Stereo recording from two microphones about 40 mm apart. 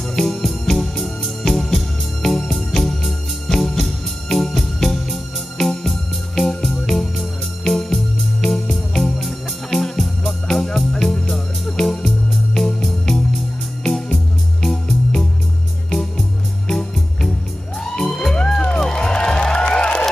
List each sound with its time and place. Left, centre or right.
0.1 s organ: centre
11.1 s music: centre